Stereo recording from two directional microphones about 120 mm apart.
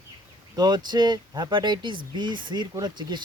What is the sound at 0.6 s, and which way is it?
Speech, 35° right (ahead or behind).